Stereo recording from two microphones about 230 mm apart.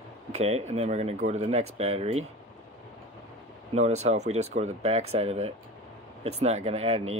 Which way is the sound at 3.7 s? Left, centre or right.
Right.